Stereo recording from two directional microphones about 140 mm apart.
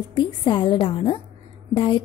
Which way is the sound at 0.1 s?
35° left (ahead or behind).